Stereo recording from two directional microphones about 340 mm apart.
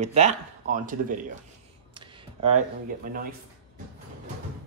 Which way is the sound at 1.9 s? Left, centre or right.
Centre.